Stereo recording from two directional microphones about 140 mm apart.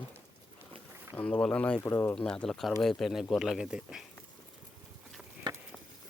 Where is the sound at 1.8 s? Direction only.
20° left (ahead or behind).